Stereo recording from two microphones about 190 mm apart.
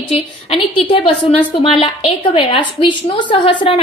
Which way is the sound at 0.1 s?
30° left (ahead or behind).